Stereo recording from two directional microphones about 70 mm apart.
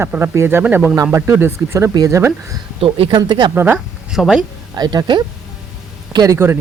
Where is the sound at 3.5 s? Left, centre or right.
Right.